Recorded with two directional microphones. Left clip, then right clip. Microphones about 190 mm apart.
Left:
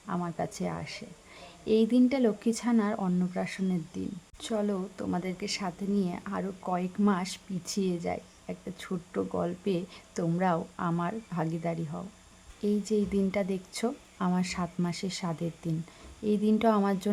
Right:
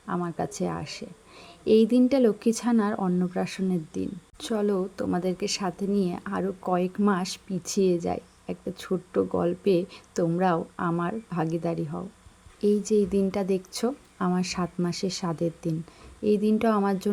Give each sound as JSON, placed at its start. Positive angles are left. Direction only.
{"t": 0.1, "sound": "speech", "side_deg": -15}